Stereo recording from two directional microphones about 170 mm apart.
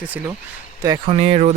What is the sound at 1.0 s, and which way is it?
Speech, 35° right (ahead or behind).